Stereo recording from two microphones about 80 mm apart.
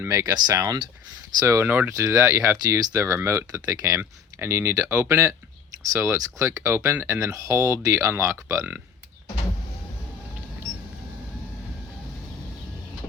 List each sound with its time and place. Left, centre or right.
0.1 s speech: right
0.3 s speech: right
1.5 s speech: right
2.0 s speech: right
4.4 s speech: right